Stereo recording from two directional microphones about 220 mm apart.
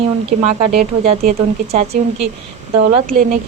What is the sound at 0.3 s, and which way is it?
A woman's voice, 35° right (ahead or behind).